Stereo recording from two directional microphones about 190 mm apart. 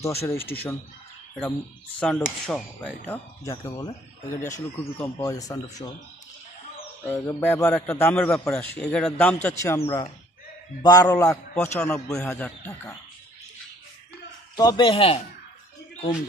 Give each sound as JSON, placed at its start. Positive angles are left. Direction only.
{"t": 0.0, "sound": "a man's voice", "side_deg": 15}
{"t": 2.0, "sound": "speech", "side_deg": 5}
{"t": 3.4, "sound": "speech", "side_deg": 20}
{"t": 7.1, "sound": "a man's voice", "side_deg": 10}
{"t": 14.5, "sound": "speech", "side_deg": 20}